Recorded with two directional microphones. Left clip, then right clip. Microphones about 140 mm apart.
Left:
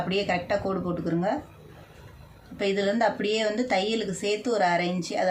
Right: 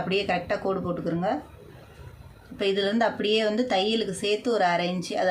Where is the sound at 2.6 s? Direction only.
20° right (ahead or behind).